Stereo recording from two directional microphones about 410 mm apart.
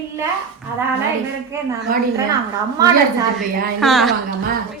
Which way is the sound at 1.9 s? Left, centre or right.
Right.